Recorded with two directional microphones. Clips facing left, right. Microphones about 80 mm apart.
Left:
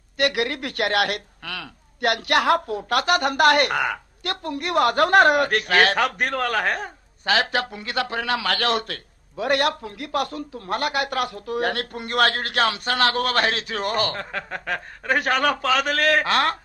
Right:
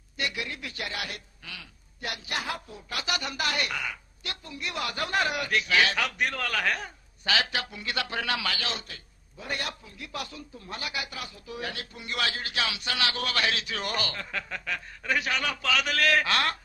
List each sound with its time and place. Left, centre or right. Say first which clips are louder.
0.2 s a man's voice: left 11 dB; left